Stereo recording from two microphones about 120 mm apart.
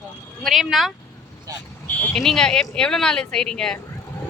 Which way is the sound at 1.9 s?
10° left (ahead or behind).